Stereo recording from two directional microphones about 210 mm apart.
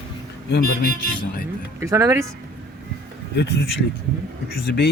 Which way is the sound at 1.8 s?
15° right (ahead or behind).